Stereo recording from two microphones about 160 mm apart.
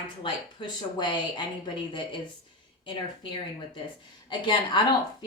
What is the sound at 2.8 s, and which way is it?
Speech, 30° left (ahead or behind).